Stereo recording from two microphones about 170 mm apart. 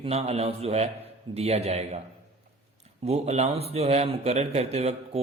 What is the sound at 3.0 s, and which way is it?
A man's voice, 40° right (ahead or behind).